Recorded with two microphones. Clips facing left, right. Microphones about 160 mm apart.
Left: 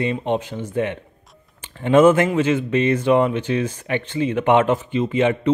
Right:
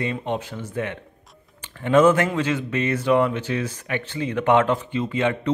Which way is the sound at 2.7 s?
30° left (ahead or behind).